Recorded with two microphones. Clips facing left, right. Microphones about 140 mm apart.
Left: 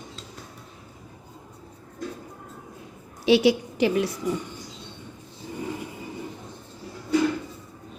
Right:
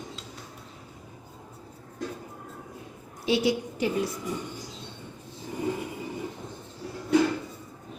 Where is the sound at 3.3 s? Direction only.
90° left.